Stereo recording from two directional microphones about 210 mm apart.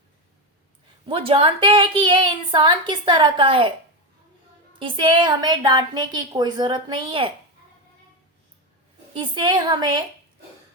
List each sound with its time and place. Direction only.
1.0 s a woman's voice: 25° right (ahead or behind)
4.8 s a woman's voice: 25° right (ahead or behind)
9.1 s a woman's voice: 25° right (ahead or behind)